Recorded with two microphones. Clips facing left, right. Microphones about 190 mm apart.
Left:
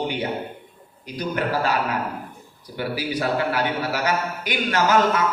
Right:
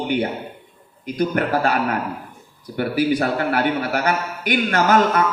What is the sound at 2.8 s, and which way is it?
A man's voice, 50° right (ahead or behind).